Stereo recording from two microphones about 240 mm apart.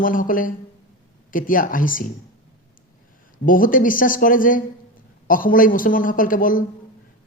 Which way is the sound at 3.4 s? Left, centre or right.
Left.